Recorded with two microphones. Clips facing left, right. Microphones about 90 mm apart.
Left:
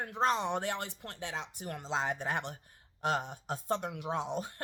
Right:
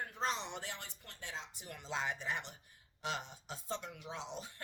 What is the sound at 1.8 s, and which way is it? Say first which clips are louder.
Speech: left 5 dB; 35° left (ahead or behind).